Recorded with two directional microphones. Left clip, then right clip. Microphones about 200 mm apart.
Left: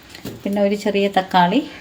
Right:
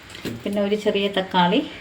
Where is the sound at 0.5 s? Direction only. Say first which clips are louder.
Left 3 dB; 55° left (ahead or behind).